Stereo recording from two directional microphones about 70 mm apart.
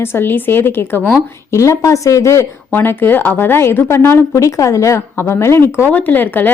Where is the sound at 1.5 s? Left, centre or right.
Left.